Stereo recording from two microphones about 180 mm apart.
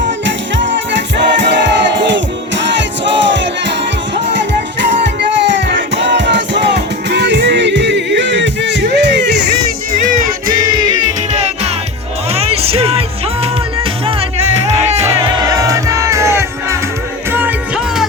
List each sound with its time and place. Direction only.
0.3 s music: 85° right
10.2 s music: 50° right (ahead or behind)
12.3 s music: 35° right (ahead or behind)
14.7 s music: 35° right (ahead or behind)
15.4 s music: 20° right (ahead or behind)